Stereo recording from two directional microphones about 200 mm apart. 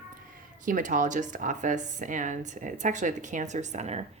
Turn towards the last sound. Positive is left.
turn(degrees=-35)  # may be behind; listen again after turning